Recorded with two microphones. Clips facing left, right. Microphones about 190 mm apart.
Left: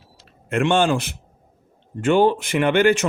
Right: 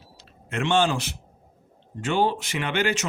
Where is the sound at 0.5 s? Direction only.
55° left (ahead or behind).